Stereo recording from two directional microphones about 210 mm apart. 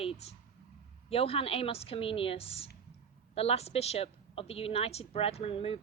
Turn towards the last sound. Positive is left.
turn(degrees=25)  # may be behind; listen again after turning